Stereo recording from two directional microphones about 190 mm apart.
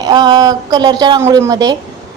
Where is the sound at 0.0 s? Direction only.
20° right (ahead or behind).